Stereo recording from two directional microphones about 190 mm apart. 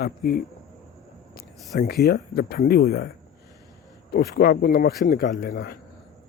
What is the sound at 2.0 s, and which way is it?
Speech, 55° left (ahead or behind).